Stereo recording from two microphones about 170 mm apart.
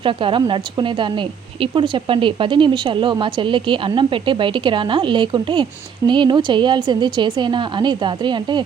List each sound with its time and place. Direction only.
0.0 s a woman's voice: 30° right (ahead or behind)